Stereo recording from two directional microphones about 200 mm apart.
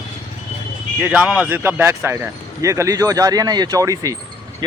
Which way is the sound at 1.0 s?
5° right (ahead or behind).